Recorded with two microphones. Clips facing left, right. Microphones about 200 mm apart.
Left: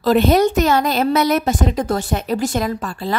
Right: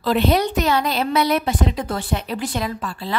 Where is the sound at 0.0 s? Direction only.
45° left (ahead or behind).